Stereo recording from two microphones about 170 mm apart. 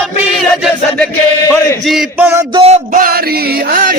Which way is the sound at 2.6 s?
40° right (ahead or behind).